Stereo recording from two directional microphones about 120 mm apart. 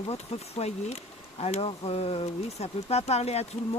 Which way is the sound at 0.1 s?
60° left (ahead or behind).